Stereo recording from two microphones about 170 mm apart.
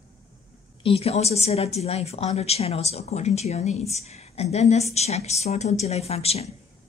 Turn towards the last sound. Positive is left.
turn(degrees=35)  # may be behind; listen again after turning